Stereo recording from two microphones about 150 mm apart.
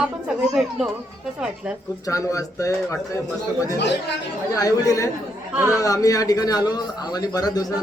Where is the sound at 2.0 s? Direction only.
20° left (ahead or behind).